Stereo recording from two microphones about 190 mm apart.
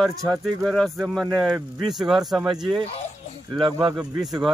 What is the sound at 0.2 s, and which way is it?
Speech, 5° left (ahead or behind).